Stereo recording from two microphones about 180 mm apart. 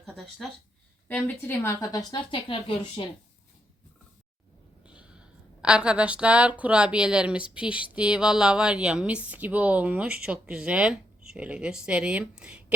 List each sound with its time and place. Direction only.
0.4 s a woman's voice: centre (ahead or behind); by 3.1 s 30° left (ahead or behind)
4.9 s a sound: 5° right (ahead or behind)
5.6 s a woman's voice: 5° right (ahead or behind)